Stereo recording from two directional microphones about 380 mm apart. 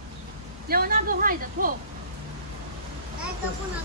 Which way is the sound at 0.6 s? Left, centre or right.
Right.